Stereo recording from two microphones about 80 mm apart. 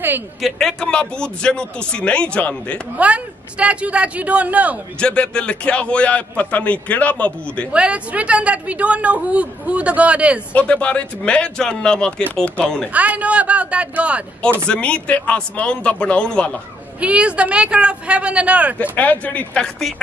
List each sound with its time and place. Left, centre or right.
0.4 s a man's voice: centre
3.0 s a woman's voice: centre
5.0 s a man's voice: centre
7.7 s a woman's voice: centre
10.5 s a man's voice: centre
12.9 s a woman's voice: centre
14.7 s a man's voice: centre
17.0 s a woman's voice: centre
18.8 s a man's voice: centre